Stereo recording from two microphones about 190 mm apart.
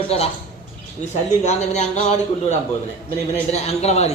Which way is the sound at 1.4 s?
35° left (ahead or behind).